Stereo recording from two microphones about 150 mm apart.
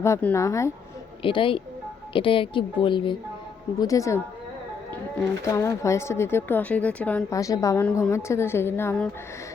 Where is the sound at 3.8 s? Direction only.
20° left (ahead or behind).